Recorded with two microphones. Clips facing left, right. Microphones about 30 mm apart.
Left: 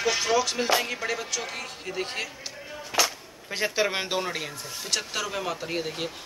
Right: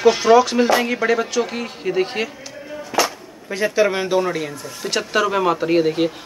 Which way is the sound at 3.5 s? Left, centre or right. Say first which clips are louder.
Right 7 dB; centre.